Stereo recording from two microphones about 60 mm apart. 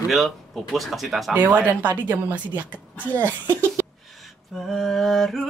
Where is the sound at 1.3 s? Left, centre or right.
Right.